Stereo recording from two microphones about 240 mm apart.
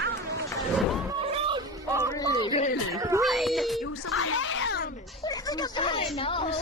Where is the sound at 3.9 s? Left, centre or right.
Left.